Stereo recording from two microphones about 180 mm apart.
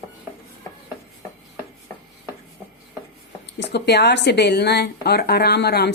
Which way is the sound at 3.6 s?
70° left (ahead or behind).